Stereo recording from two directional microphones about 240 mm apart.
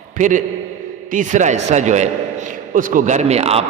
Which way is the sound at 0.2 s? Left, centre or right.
Right.